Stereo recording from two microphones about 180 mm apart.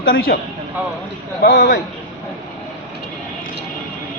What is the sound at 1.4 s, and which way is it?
Speech, 55° left (ahead or behind).